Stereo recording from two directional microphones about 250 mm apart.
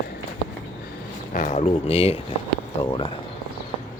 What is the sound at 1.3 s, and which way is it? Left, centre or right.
Speech, left.